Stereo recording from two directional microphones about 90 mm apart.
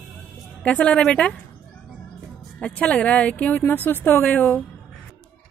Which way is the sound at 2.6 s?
15° left (ahead or behind).